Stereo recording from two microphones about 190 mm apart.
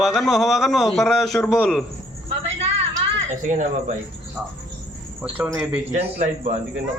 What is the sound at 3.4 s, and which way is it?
Speech, 40° right (ahead or behind).